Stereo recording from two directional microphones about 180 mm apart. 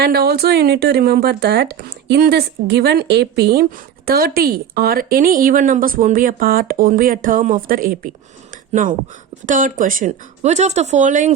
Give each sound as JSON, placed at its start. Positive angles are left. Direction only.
{"t": 0.0, "sound": "speech", "side_deg": -60}